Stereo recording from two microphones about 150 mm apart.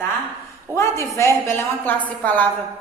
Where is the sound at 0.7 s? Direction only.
20° left (ahead or behind).